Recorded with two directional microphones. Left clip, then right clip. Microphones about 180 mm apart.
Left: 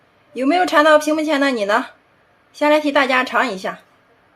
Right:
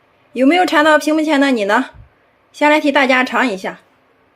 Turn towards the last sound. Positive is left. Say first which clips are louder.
# right 2 dB
turn(degrees=-20)  # may be behind; listen again after turning